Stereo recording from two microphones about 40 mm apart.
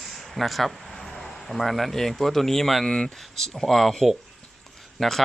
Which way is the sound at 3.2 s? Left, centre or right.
Centre.